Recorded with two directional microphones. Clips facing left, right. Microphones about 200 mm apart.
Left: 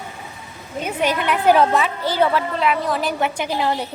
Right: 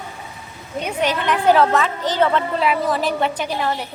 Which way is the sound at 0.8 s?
5° left (ahead or behind).